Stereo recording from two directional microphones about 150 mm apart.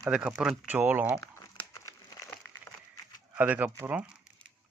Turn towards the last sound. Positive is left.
turn(degrees=-10)  # may be behind; listen again after turning